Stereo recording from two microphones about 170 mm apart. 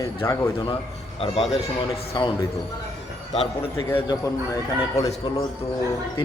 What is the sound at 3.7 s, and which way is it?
A man's voice, 20° left (ahead or behind).